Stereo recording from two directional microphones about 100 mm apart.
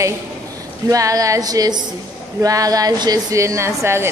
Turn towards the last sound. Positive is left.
turn(degrees=-25)  # may be behind; listen again after turning